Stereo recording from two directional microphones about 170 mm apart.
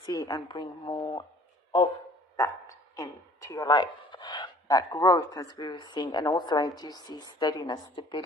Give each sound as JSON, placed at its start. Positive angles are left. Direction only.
{"t": 0.0, "sound": "a woman's voice", "side_deg": 20}
{"t": 2.3, "sound": "speech", "side_deg": 20}